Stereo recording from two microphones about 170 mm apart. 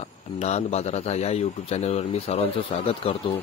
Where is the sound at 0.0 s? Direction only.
40° left (ahead or behind).